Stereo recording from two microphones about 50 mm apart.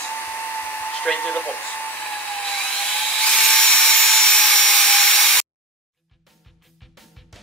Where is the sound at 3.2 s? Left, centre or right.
Centre.